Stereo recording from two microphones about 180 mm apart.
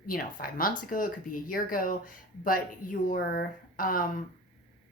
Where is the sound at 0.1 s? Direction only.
55° left (ahead or behind).